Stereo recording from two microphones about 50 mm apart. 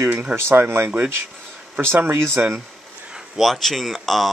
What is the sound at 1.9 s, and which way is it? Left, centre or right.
Speech, right.